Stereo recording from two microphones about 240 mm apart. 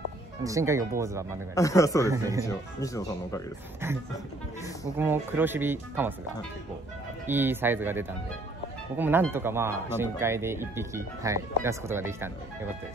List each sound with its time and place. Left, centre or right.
0.4 s speech: centre
1.5 s speech: centre
4.9 s speech: centre
7.2 s speech: centre